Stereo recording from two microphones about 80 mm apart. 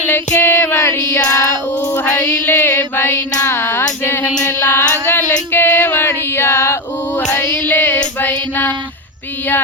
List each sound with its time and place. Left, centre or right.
0.0 s female singing: left
2.0 s music: left
4.4 s singing: left
5.5 s female singing: left